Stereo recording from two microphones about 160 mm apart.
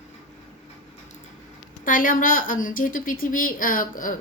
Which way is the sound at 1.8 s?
55° left (ahead or behind).